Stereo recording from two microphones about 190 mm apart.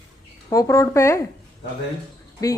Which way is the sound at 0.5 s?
15° left (ahead or behind).